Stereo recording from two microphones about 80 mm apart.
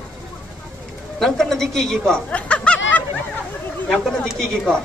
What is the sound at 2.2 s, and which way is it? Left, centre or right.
Snicker, centre.